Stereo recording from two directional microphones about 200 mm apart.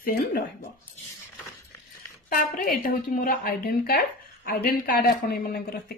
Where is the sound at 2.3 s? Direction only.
45° left (ahead or behind).